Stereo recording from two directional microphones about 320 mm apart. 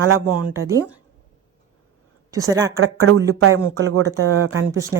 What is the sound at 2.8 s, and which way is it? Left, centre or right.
Speech, right.